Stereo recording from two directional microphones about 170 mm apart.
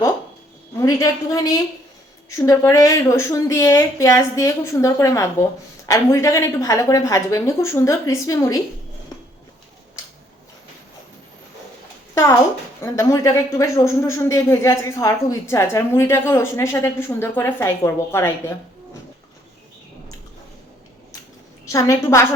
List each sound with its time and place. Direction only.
0.8 s a woman's voice: 20° left (ahead or behind)
12.1 s speech: 15° left (ahead or behind)
21.7 s speech: 20° left (ahead or behind)